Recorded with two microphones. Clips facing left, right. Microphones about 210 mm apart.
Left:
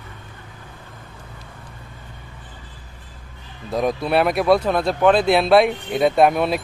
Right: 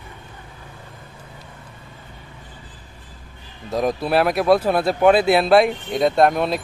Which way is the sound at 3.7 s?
Centre (ahead or behind).